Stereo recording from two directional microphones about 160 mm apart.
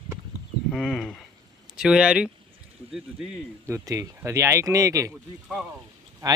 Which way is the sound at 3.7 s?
20° right (ahead or behind).